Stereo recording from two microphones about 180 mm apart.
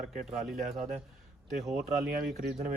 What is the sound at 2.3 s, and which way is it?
Speech, 55° right (ahead or behind).